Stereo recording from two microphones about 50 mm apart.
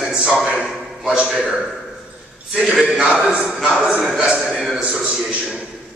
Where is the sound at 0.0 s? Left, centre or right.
Centre.